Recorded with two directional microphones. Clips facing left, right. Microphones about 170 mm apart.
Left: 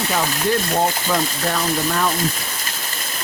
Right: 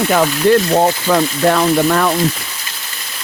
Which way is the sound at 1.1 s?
70° right (ahead or behind).